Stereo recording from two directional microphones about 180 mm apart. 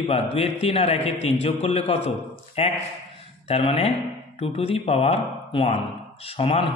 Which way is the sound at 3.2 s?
35° left (ahead or behind).